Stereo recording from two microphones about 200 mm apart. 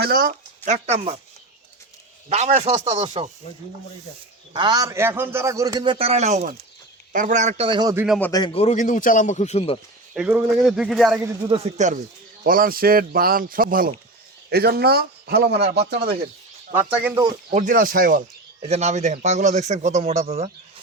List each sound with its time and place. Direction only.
0.0 s a sound: 50° right (ahead or behind)
0.7 s a man's voice: 35° right (ahead or behind)
2.3 s a man's voice: 35° right (ahead or behind)
4.5 s a man's voice: 20° right (ahead or behind)
8.2 s a man's voice: 20° left (ahead or behind)
8.5 s a man's voice: 35° left (ahead or behind)
10.2 s speech: 5° right (ahead or behind)
11.4 s a man's voice: 30° right (ahead or behind)
12.4 s a man's voice: 45° right (ahead or behind)
16.7 s speech: 5° right (ahead or behind)
17.5 s a man's voice: 40° right (ahead or behind)